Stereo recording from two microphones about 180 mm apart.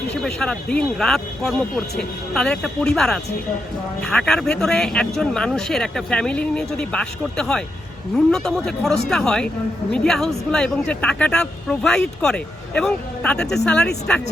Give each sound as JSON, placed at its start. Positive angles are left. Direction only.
{"t": 0.1, "sound": "speech", "side_deg": 5}